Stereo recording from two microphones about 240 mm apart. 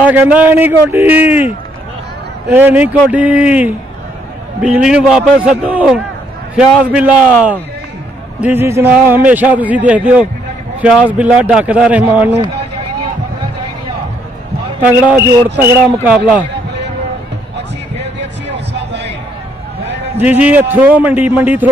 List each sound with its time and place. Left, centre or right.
0.1 s a man's voice: centre
2.5 s a man's voice: centre
14.8 s a man's voice: centre
18.2 s a sound: right
20.2 s a man's voice: centre